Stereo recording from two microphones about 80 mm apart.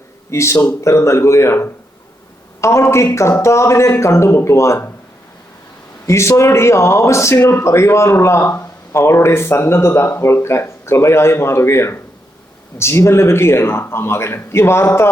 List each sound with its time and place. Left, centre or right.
0.3 s speech: left
6.1 s speech: left